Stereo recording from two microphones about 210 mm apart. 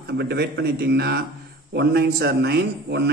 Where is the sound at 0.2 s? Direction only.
50° right (ahead or behind).